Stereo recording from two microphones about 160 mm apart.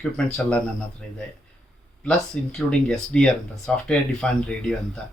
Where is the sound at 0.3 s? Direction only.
5° left (ahead or behind).